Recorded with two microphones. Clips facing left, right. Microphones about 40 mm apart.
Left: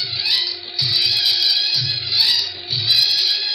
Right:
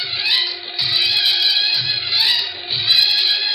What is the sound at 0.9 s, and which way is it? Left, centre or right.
Music, right.